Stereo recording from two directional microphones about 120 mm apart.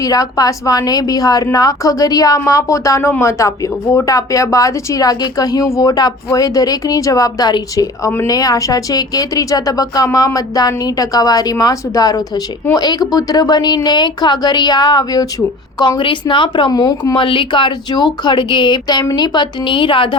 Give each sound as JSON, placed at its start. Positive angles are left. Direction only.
{"t": 0.0, "sound": "speech", "side_deg": 30}
{"t": 17.2, "sound": "speech", "side_deg": 45}